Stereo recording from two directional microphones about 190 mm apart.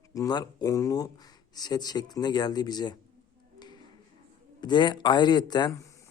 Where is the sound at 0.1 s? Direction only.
20° left (ahead or behind).